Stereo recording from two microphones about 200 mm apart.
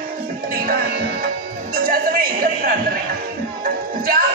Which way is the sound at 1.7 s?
45° right (ahead or behind).